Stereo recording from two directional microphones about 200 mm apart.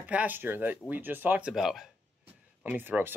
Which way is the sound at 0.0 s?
5° right (ahead or behind).